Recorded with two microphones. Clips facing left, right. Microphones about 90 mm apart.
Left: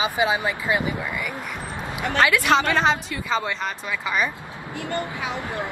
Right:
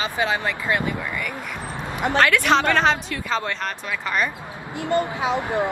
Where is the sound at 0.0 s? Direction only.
10° left (ahead or behind).